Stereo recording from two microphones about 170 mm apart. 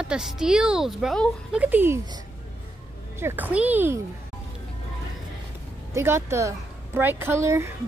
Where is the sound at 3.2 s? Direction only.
10° right (ahead or behind).